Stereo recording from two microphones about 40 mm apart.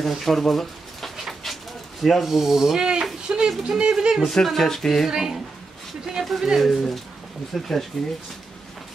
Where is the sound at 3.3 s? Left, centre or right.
Right.